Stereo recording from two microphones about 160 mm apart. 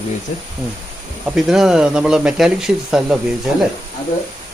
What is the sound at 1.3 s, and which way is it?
Speech, centre (ahead or behind).